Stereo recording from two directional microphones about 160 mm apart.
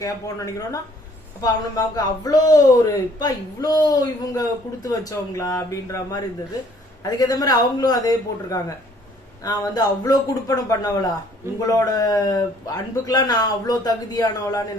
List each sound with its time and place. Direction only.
0.0 s a man's voice: 20° left (ahead or behind)